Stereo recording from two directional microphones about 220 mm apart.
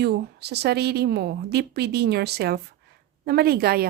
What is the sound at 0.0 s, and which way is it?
Speech, 50° right (ahead or behind).